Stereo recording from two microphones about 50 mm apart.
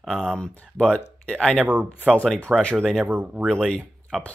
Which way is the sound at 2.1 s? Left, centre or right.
Centre.